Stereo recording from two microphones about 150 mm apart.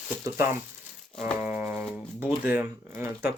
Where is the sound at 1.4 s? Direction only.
15° right (ahead or behind).